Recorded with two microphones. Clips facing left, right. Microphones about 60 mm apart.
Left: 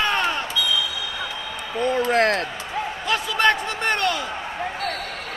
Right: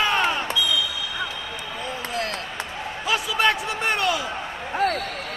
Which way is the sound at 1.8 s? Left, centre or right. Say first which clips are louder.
Left 11 dB; left.